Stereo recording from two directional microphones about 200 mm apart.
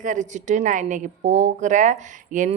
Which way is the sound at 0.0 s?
40° right (ahead or behind).